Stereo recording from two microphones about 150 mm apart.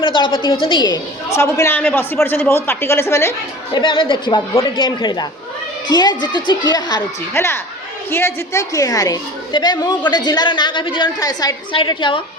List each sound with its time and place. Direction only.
0.0 s a woman's voice: 35° left (ahead or behind)
1.4 s a woman's voice: 20° left (ahead or behind)
3.8 s a woman's voice: 35° left (ahead or behind)
7.3 s a woman's voice: 15° left (ahead or behind); by 12.2 s 35° left (ahead or behind)